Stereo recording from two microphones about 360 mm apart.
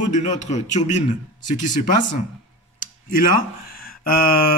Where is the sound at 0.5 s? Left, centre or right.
Centre.